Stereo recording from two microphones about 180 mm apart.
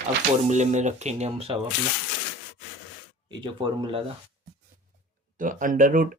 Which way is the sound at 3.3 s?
25° right (ahead or behind).